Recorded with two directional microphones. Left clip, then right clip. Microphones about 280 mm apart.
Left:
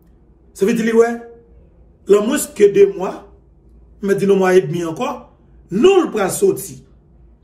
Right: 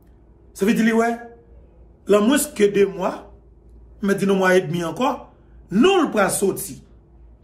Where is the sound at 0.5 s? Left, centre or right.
Centre.